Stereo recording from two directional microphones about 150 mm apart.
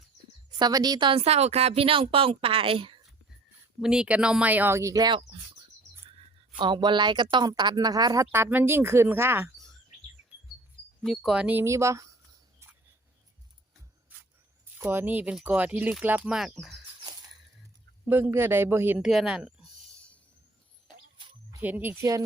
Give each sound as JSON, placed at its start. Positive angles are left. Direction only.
{"t": 0.6, "sound": "speech", "side_deg": -25}
{"t": 3.8, "sound": "speech", "side_deg": -5}
{"t": 6.6, "sound": "speech", "side_deg": -30}
{"t": 11.0, "sound": "speech", "side_deg": 0}
{"t": 14.8, "sound": "speech", "side_deg": -15}
{"t": 18.0, "sound": "speech", "side_deg": -15}
{"t": 21.6, "sound": "speech", "side_deg": -10}